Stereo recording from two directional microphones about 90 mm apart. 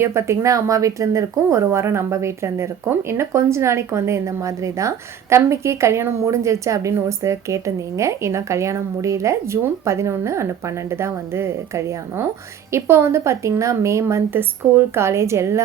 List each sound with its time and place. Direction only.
0.0 s speech: 30° right (ahead or behind)